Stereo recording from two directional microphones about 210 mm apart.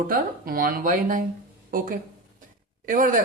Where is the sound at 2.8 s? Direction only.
40° right (ahead or behind).